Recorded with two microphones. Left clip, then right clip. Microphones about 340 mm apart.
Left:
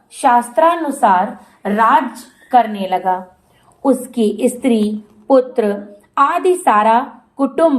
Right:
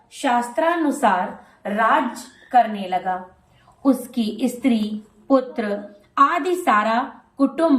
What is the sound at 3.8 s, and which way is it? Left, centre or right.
A woman's voice, centre.